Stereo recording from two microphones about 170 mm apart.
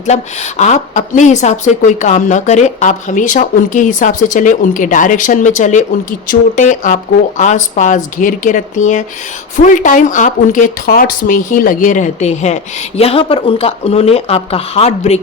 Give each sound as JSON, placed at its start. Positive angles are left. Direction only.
{"t": 0.0, "sound": "a woman's voice", "side_deg": 45}